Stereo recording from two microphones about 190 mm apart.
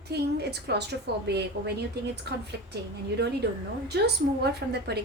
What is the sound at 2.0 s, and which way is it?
Speech, 60° right (ahead or behind).